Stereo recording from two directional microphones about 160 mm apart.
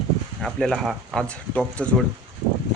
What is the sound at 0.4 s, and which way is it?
Speech, centre (ahead or behind).